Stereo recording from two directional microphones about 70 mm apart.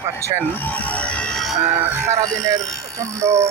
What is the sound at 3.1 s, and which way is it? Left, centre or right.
Speech, right.